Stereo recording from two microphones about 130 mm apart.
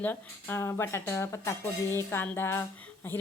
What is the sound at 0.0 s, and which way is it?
A woman's voice, 15° left (ahead or behind).